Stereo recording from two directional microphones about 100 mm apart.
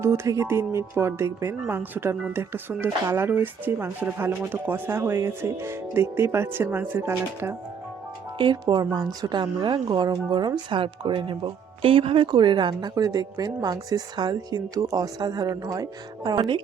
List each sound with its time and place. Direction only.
0.0 s speech: 30° right (ahead or behind)
8.4 s a woman's voice: 45° right (ahead or behind)